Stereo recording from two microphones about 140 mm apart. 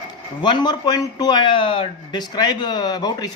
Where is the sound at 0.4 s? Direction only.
30° left (ahead or behind).